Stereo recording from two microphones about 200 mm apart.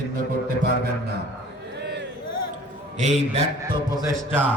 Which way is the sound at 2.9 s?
35° right (ahead or behind).